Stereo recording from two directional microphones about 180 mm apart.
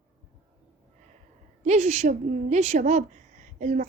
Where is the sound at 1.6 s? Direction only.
35° right (ahead or behind).